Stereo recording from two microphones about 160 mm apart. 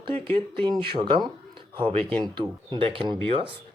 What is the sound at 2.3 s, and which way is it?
Speech, 30° right (ahead or behind).